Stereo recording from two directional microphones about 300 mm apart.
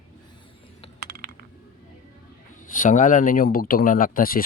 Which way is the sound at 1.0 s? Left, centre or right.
Right.